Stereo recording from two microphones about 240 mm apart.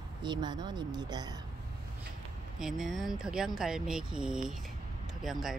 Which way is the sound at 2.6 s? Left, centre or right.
Centre.